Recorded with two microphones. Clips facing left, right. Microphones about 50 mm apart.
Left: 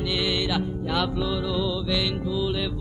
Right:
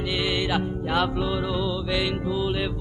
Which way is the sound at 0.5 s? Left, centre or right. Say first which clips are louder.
Right 1 dB; right.